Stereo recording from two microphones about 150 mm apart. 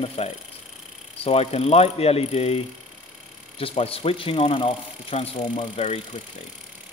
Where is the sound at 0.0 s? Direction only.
45° left (ahead or behind).